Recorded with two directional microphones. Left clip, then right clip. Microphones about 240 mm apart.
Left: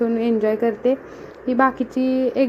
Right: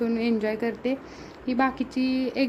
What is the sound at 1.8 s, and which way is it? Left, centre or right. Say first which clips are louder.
Speech: left 7 dB; right.